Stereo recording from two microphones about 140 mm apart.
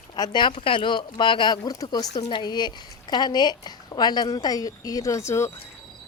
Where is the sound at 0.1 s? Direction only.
35° left (ahead or behind).